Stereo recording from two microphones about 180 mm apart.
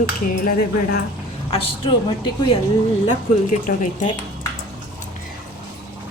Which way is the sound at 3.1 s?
40° left (ahead or behind).